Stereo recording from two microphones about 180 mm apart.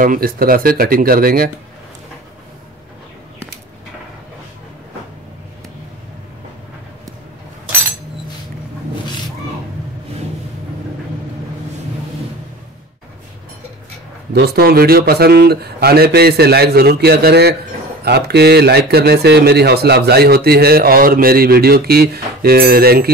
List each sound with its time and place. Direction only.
0.0 s speech: 50° right (ahead or behind)
14.3 s speech: 65° right (ahead or behind)